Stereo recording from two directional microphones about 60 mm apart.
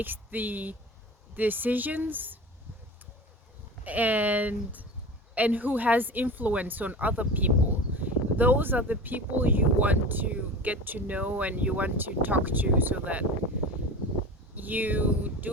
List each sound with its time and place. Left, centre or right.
0.0 s speech: right
3.8 s speech: right
7.9 s a sound: right
8.9 s speech: right
14.5 s speech: right